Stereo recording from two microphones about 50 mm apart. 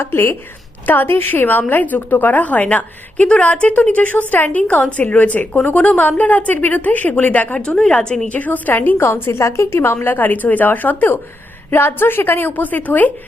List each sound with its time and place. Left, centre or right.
0.0 s a woman's voice: left
7.6 s a woman's voice: centre
8.3 s speech: left
9.0 s a woman's voice: left
9.4 s a woman's voice: left